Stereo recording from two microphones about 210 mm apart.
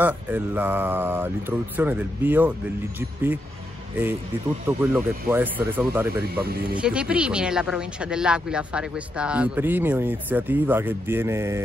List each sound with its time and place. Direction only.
0.0 s speech: 10° right (ahead or behind)
4.6 s speech: 10° right (ahead or behind)
6.3 s speech: 50° right (ahead or behind)
6.7 s speech: 5° right (ahead or behind)